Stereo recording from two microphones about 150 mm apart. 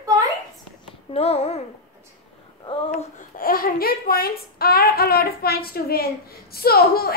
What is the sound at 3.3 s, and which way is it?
Speech, 75° left (ahead or behind).